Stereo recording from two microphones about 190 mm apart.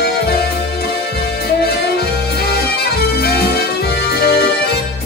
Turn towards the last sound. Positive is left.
turn(degrees=55)  # may be behind; listen again after turning